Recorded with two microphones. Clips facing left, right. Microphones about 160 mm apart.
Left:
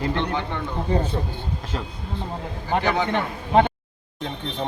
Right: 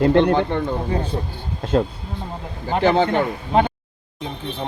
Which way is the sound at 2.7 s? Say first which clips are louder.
Right 5 dB; 25° right (ahead or behind).